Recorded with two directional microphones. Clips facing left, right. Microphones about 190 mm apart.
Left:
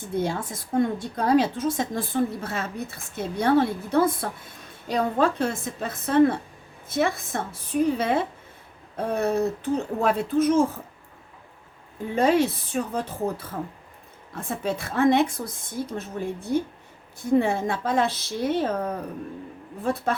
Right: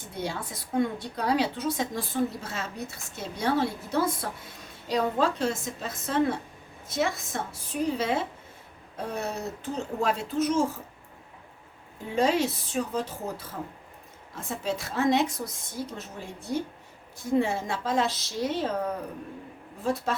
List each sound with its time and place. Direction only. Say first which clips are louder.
0.2 s a woman's voice: left 5 dB; 50° left (ahead or behind)
12.1 s a woman's voice: left 4 dB; 55° left (ahead or behind)
19.8 s a woman's voice: left 3 dB; 55° left (ahead or behind)